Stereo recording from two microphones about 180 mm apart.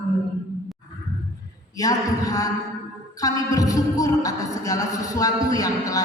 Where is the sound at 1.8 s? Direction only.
20° left (ahead or behind).